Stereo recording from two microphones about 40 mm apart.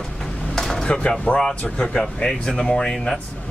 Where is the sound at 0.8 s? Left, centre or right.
Left.